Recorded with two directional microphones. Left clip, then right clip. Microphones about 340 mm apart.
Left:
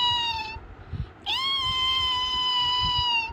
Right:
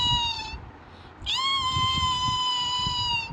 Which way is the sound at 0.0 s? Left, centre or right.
Centre.